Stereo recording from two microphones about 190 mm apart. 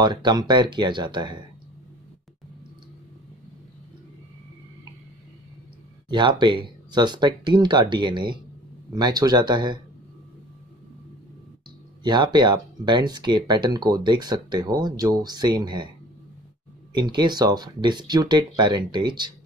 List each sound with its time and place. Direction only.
0.0 s speech: 25° right (ahead or behind)
6.0 s speech: 25° right (ahead or behind)
12.0 s speech: 25° right (ahead or behind)
16.9 s speech: 25° right (ahead or behind)